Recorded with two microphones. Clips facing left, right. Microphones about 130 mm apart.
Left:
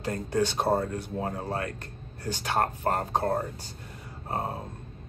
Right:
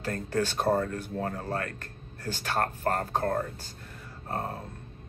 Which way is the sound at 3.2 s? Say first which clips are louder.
Left 1 dB; 30° left (ahead or behind).